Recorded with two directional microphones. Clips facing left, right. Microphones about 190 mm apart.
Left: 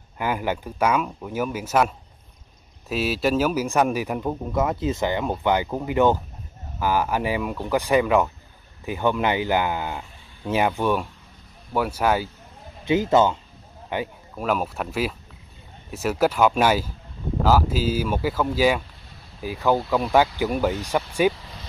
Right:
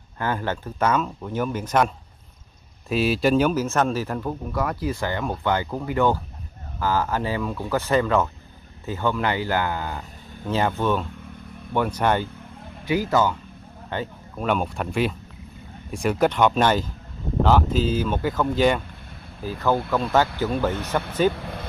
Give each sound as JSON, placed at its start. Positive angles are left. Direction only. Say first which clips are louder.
{"t": 0.2, "sound": "speech", "louder": "left 1 dB", "side_deg": 10}
{"t": 2.9, "sound": "speech", "louder": "right 3 dB", "side_deg": 0}
{"t": 12.8, "sound": "a man's voice", "louder": "left 3 dB", "side_deg": 25}
{"t": 13.8, "sound": "a sound", "louder": "left 2 dB", "side_deg": 10}
{"t": 14.4, "sound": "speech", "louder": "right 1 dB", "side_deg": 5}
{"t": 21.3, "sound": "speech", "louder": "right 1 dB", "side_deg": -55}